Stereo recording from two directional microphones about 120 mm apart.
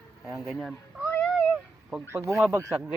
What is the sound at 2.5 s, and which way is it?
Speech, 20° right (ahead or behind).